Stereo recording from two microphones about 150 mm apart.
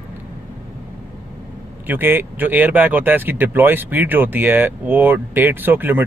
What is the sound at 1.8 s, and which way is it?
Speech, 15° right (ahead or behind).